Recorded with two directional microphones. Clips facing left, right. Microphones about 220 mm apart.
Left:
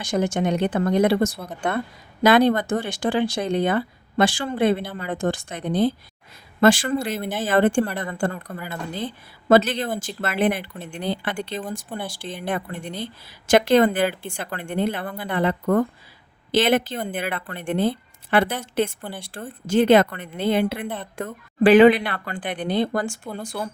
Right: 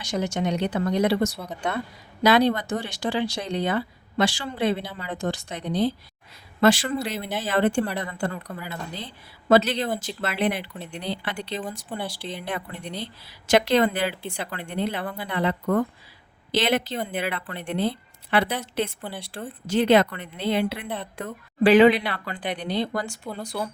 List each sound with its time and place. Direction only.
0.0 s a woman's voice: 50° left (ahead or behind)